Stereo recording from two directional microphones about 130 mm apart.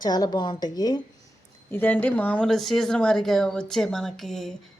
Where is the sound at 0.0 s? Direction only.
30° left (ahead or behind).